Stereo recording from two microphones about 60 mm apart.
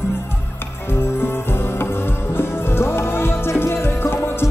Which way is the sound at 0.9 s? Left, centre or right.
Left.